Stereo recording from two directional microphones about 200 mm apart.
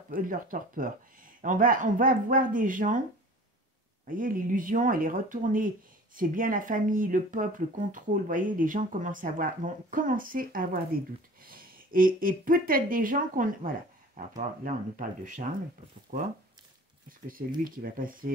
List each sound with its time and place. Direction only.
0.1 s speech: 45° right (ahead or behind)
4.1 s speech: 45° right (ahead or behind)
17.6 s speech: 45° right (ahead or behind)